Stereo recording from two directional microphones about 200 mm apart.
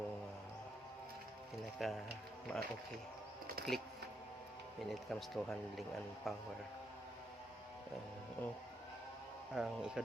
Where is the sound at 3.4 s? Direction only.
50° right (ahead or behind).